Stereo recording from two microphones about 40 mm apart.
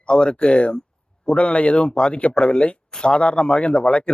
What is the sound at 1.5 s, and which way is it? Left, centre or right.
Speech, left.